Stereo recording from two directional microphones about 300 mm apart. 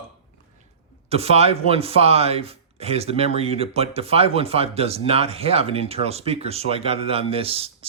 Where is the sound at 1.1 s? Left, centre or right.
Centre.